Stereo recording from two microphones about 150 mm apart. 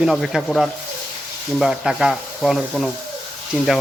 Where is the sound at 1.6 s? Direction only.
5° right (ahead or behind).